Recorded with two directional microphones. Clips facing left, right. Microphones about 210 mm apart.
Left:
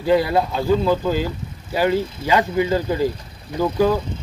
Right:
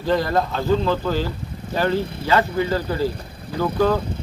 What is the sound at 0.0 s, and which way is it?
Speech, 10° left (ahead or behind).